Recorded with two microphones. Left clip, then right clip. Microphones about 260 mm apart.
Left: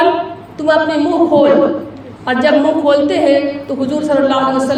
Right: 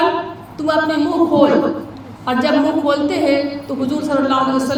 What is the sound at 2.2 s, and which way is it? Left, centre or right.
A woman's voice, right.